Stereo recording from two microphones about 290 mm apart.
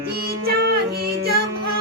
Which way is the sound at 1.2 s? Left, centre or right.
Right.